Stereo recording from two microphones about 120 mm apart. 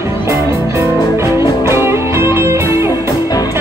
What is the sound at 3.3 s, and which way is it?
Music, 30° left (ahead or behind).